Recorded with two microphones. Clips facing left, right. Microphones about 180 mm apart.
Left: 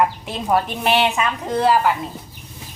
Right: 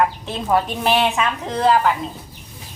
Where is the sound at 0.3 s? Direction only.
10° left (ahead or behind).